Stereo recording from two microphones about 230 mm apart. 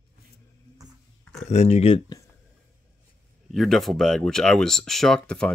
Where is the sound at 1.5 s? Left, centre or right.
Left.